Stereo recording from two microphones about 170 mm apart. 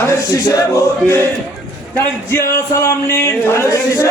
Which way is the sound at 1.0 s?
15° left (ahead or behind).